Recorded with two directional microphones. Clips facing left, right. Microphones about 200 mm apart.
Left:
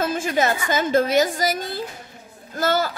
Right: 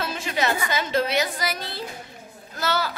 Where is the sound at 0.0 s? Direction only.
50° left (ahead or behind).